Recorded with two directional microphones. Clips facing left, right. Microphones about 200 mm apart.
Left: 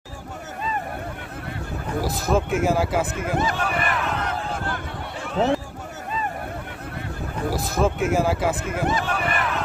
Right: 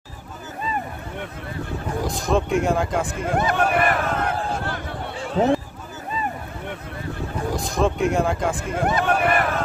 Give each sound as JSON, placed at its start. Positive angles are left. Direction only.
{"t": 2.0, "sound": "speech", "side_deg": 5}
{"t": 3.3, "sound": "a sound", "side_deg": -60}
{"t": 7.5, "sound": "speech", "side_deg": 5}
{"t": 8.8, "sound": "speech", "side_deg": -60}